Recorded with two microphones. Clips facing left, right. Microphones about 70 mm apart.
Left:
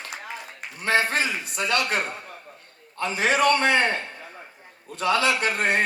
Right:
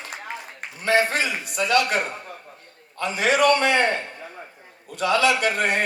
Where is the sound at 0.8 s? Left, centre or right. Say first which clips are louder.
Right 2 dB; left.